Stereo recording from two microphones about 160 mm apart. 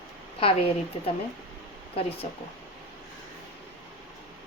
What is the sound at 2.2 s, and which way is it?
Speech, 45° left (ahead or behind).